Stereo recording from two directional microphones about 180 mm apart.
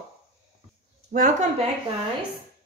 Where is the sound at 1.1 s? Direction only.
50° right (ahead or behind).